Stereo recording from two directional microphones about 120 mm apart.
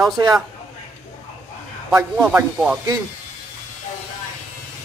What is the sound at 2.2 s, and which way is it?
Speech, 10° right (ahead or behind).